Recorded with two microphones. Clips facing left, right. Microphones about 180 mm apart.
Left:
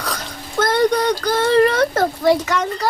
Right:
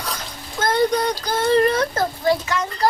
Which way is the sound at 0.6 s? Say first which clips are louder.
Left 3 dB; 70° left (ahead or behind).